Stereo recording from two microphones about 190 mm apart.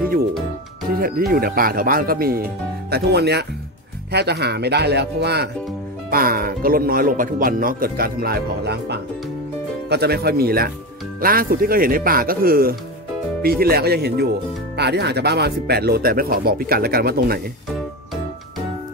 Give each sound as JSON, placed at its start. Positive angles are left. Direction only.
{"t": 0.9, "sound": "speech", "side_deg": -50}